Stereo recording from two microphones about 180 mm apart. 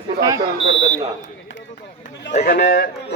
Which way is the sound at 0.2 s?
20° right (ahead or behind).